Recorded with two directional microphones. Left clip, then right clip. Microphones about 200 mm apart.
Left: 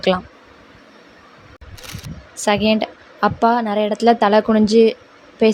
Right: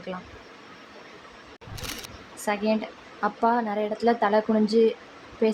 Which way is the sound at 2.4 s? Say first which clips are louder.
Left 9 dB; 40° left (ahead or behind).